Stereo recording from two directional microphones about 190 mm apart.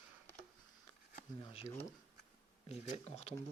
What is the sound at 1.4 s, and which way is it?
Speech, 30° left (ahead or behind).